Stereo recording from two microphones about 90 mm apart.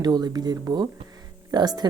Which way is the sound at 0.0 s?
50° right (ahead or behind).